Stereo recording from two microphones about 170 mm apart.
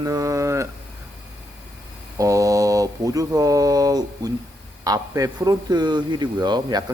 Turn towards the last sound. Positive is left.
turn(degrees=-25)  # may be behind; listen again after turning